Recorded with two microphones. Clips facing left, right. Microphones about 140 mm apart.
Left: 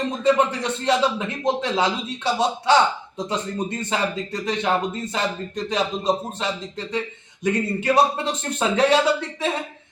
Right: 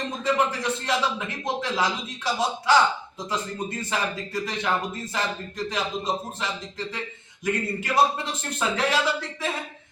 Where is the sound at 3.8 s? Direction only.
25° left (ahead or behind).